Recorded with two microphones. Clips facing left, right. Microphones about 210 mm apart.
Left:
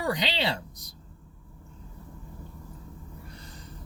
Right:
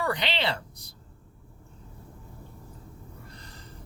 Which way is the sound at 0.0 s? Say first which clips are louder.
Even; 20° left (ahead or behind).